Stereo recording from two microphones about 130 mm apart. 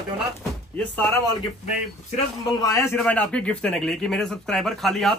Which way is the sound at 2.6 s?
25° left (ahead or behind).